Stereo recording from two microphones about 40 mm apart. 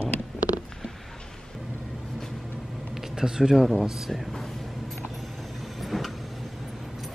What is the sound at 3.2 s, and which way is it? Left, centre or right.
Speech, centre.